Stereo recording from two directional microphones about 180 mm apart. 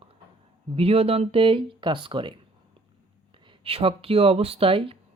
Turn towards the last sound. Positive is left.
turn(degrees=-30)  # may be behind; listen again after turning